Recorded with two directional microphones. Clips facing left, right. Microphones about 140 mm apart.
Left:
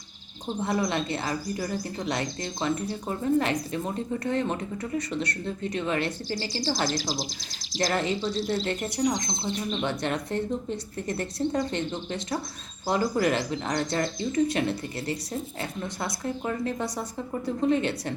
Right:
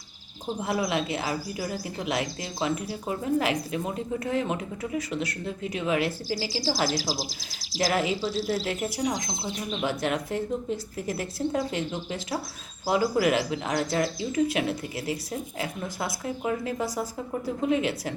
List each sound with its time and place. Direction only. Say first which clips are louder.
0.4 s speech: left 1 dB; 5° right (ahead or behind)